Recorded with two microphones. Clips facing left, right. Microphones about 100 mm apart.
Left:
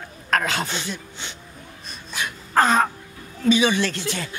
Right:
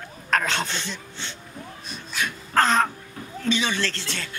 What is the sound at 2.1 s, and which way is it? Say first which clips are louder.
Wail: left 2 dB; 10° left (ahead or behind).